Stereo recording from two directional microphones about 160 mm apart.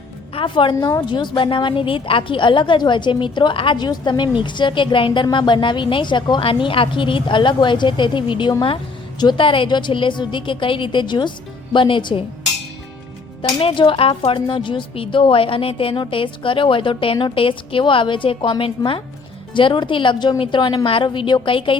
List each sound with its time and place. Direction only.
0.3 s a woman's voice: 30° left (ahead or behind)
13.6 s a woman's voice: 35° left (ahead or behind)